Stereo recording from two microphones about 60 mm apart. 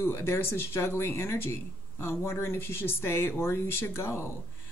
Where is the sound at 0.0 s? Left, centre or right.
Left.